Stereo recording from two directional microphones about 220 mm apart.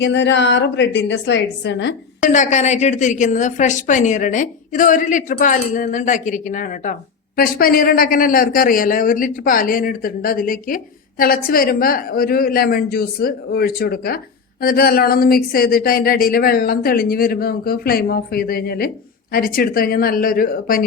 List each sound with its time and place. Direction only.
0.0 s speech: 55° left (ahead or behind)
2.2 s a woman's voice: 35° left (ahead or behind)